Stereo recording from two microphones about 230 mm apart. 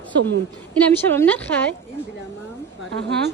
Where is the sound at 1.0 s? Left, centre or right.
Centre.